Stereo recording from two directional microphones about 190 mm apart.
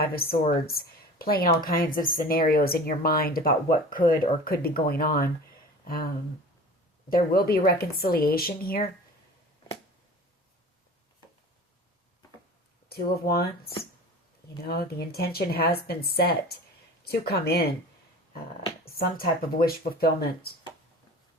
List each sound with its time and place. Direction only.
0.0 s a woman's voice: 50° left (ahead or behind)
7.1 s a woman's voice: 50° left (ahead or behind)
12.9 s speech: 55° left (ahead or behind)
18.9 s a woman's voice: 50° left (ahead or behind)